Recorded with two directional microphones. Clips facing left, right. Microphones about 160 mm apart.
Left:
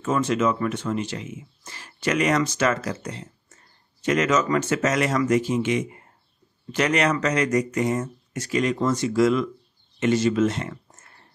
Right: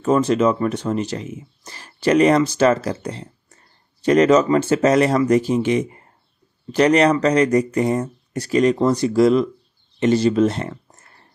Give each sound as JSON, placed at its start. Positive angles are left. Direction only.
{"t": 0.0, "sound": "speech", "side_deg": -35}